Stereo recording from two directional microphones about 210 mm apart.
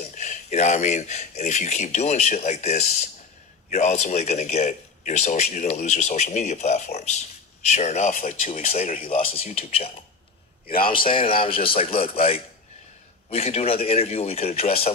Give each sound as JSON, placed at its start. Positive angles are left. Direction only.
{"t": 0.1, "sound": "a man's voice", "side_deg": 35}
{"t": 9.1, "sound": "speech", "side_deg": 25}
{"t": 10.7, "sound": "a man's voice", "side_deg": 45}
{"t": 11.1, "sound": "speech", "side_deg": 25}